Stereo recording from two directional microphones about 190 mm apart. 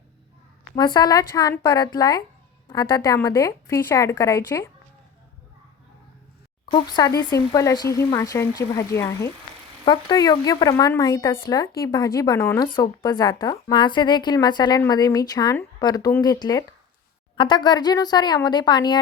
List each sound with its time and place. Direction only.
0.9 s a woman's voice: 20° left (ahead or behind)
6.7 s a woman's voice: 25° left (ahead or behind)